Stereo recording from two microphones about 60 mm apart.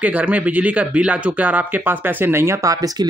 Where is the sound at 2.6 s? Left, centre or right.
Right.